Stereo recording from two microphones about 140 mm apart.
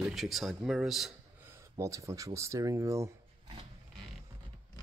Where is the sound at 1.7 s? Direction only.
20° right (ahead or behind).